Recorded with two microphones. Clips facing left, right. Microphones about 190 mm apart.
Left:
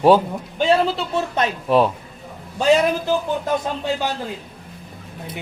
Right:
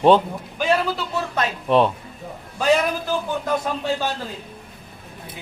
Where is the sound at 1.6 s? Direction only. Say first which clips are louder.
Even; centre (ahead or behind).